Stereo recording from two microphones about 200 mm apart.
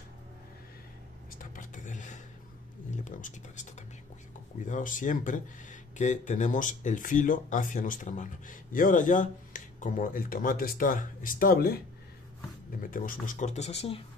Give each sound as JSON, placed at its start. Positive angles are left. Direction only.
{"t": 1.4, "sound": "speech", "side_deg": 40}
{"t": 4.6, "sound": "speech", "side_deg": 40}
{"t": 12.8, "sound": "speech", "side_deg": 45}